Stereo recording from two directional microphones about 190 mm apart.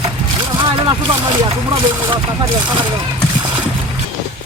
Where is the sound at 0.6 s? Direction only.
25° right (ahead or behind).